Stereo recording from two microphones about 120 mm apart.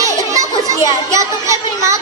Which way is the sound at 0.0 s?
25° right (ahead or behind).